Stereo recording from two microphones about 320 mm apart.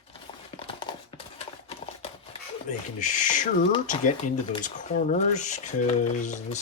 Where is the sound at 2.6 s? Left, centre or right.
Left.